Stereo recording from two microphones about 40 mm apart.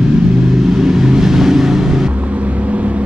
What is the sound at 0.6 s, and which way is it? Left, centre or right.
Vehicle, centre.